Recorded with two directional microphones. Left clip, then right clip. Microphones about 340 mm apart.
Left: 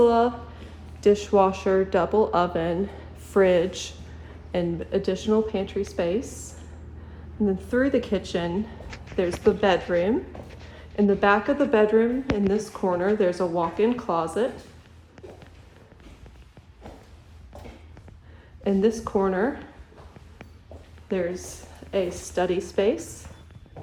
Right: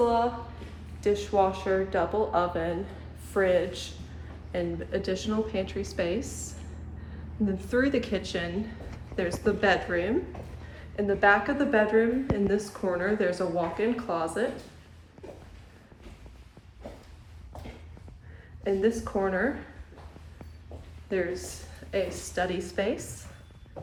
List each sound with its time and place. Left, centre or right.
0.0 s a sound: centre
1.0 s speech: left
4.5 s speech: centre
18.6 s speech: centre
21.1 s speech: centre